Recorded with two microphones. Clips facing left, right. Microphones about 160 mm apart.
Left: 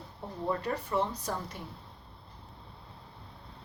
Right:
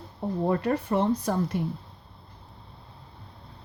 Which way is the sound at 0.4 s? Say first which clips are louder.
Right 6 dB; 60° right (ahead or behind).